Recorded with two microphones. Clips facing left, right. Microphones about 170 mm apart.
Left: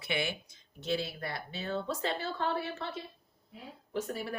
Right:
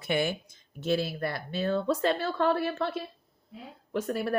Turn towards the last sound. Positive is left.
turn(degrees=-65)  # may be behind; listen again after turning